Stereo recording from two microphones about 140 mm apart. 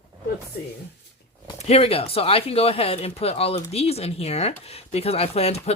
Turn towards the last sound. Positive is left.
turn(degrees=50)  # may be behind; listen again after turning